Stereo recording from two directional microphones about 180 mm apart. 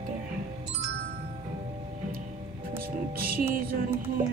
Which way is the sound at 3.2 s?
55° right (ahead or behind).